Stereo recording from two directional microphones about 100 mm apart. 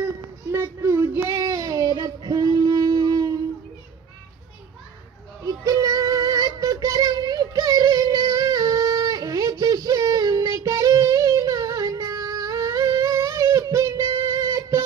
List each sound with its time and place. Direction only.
0.0 s child singing: 25° right (ahead or behind)
5.4 s music: 35° right (ahead or behind)